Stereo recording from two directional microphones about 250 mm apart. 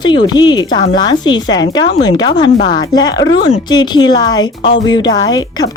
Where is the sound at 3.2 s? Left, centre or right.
Left.